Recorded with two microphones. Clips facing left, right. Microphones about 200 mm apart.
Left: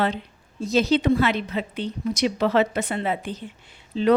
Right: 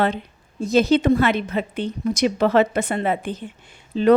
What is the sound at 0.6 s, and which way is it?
A woman's voice, 50° right (ahead or behind).